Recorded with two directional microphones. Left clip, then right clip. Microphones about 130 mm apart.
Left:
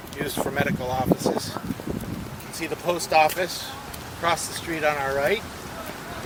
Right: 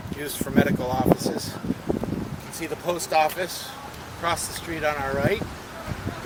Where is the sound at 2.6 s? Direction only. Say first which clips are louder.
Left 2 dB; 40° left (ahead or behind).